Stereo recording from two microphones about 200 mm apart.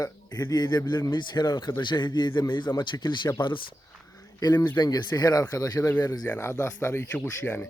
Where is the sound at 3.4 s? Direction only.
25° left (ahead or behind).